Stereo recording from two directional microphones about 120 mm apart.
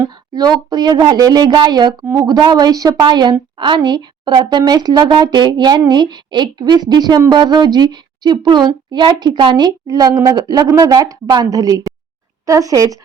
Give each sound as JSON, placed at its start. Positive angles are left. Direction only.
{"t": 0.0, "sound": "a woman's voice", "side_deg": -35}